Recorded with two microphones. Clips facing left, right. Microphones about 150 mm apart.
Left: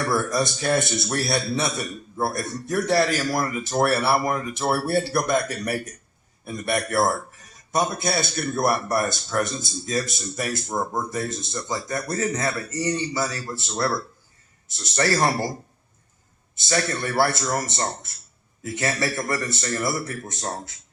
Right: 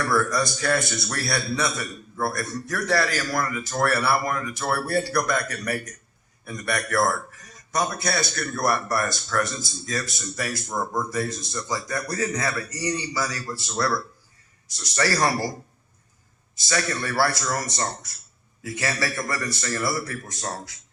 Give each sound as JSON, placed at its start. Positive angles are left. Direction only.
{"t": 0.0, "sound": "a man's voice", "side_deg": 25}
{"t": 16.6, "sound": "a man's voice", "side_deg": 25}